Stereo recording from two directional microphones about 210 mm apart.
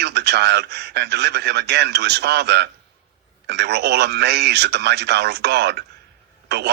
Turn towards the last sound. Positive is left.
turn(degrees=-50)  # may be behind; listen again after turning